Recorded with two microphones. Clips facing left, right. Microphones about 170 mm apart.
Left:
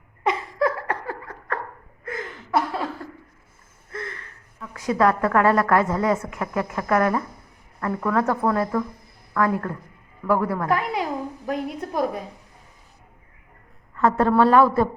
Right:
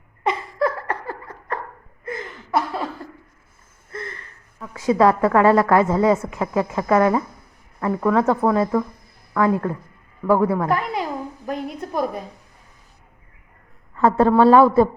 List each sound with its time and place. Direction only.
0.3 s a sound: 5° left (ahead or behind)
2.0 s chuckle: centre (ahead or behind)
4.7 s a woman's voice: 25° right (ahead or behind)
10.7 s a woman's voice: 5° left (ahead or behind)
14.0 s a woman's voice: 30° right (ahead or behind)